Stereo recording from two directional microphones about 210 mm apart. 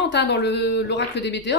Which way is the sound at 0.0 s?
55° left (ahead or behind).